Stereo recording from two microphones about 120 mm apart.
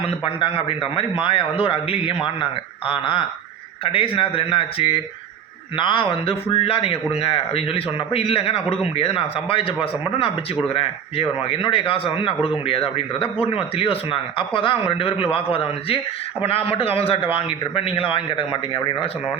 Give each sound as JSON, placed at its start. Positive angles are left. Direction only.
{"t": 0.0, "sound": "a man's voice", "side_deg": 45}